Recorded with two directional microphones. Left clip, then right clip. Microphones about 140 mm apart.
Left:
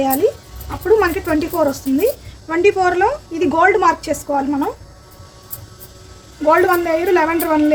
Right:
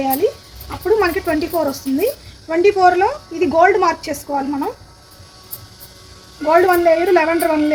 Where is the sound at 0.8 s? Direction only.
25° right (ahead or behind).